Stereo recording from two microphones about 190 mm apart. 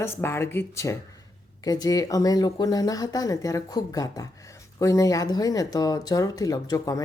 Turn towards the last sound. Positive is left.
turn(degrees=20)  # may be behind; listen again after turning